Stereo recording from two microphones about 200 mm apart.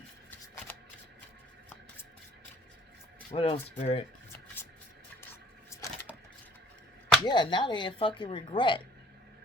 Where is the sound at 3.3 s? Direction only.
30° left (ahead or behind).